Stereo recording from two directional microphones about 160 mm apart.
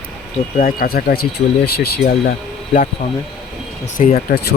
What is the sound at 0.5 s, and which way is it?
Speech, 60° left (ahead or behind).